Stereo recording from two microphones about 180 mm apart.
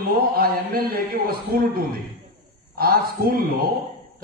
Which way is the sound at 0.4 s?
55° right (ahead or behind).